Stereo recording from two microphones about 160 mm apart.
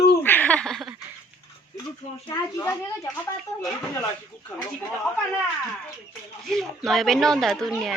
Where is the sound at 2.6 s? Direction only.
15° left (ahead or behind).